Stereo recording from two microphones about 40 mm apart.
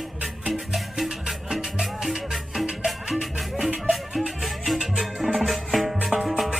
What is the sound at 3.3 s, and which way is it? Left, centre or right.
Music, centre.